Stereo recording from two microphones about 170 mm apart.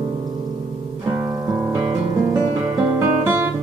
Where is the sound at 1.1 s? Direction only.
20° right (ahead or behind).